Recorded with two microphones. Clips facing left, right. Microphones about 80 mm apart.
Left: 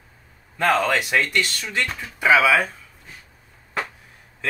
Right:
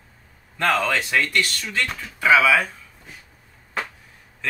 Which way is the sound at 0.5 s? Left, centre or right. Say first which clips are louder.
Left 2 dB; centre.